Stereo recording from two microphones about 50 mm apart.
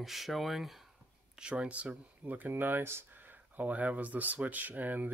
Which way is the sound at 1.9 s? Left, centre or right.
Right.